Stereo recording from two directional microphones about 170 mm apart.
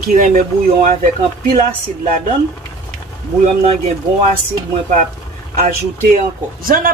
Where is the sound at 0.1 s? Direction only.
50° right (ahead or behind).